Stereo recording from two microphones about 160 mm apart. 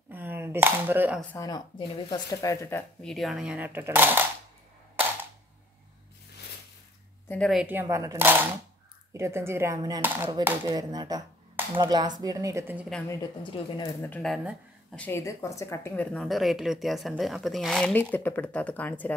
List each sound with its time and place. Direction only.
0.1 s cap gun: 10° right (ahead or behind)
1.3 s speech: 20° left (ahead or behind)
3.0 s speech: centre (ahead or behind)
7.2 s a woman's voice: 5° left (ahead or behind)
7.6 s speech: 15° right (ahead or behind)
10.0 s speech: 10° right (ahead or behind)
10.7 s a woman's voice: 25° right (ahead or behind)
13.1 s speech: 30° left (ahead or behind)
14.0 s speech: 10° left (ahead or behind)
14.3 s speech: 10° right (ahead or behind)
15.0 s a woman's voice: 15° left (ahead or behind)